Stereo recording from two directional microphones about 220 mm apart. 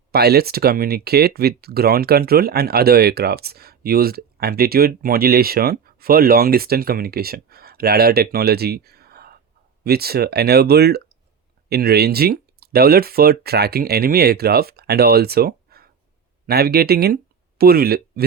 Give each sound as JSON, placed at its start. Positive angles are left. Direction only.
{"t": 0.1, "sound": "speech", "side_deg": -45}